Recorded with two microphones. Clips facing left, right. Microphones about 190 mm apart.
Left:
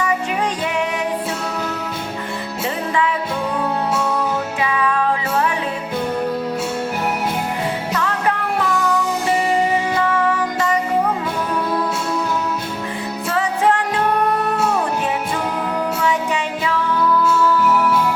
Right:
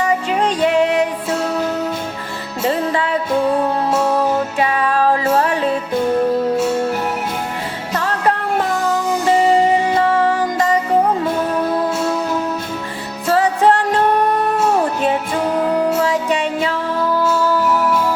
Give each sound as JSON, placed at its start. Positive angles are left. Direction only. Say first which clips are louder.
{"t": 2.6, "sound": "music", "louder": "right 3 dB", "side_deg": -35}
{"t": 4.6, "sound": "music", "louder": "right 2 dB", "side_deg": -35}
{"t": 9.5, "sound": "music", "louder": "right 4 dB", "side_deg": -30}
{"t": 13.2, "sound": "music", "louder": "right 5 dB", "side_deg": -35}
{"t": 16.0, "sound": "music", "louder": "right 3 dB", "side_deg": -35}